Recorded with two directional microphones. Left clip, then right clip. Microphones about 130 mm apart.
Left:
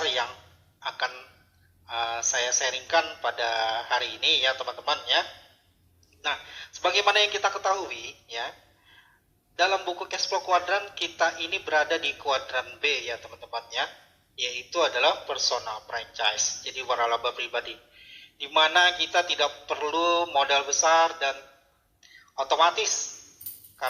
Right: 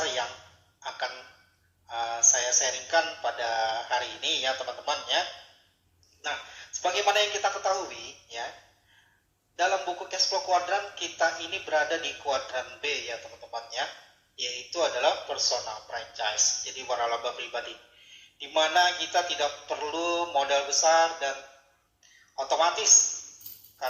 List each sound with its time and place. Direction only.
0.0 s a sound: 20° right (ahead or behind)
1.9 s speech: 20° right (ahead or behind)
6.2 s speech: 25° right (ahead or behind)
9.6 s speech: 20° right (ahead or behind)
22.4 s speech: 20° right (ahead or behind)